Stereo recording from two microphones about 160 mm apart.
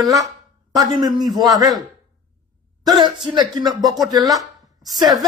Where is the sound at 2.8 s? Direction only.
25° right (ahead or behind).